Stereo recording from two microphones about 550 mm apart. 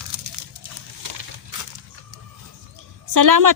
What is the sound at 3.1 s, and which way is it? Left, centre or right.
Speech, right.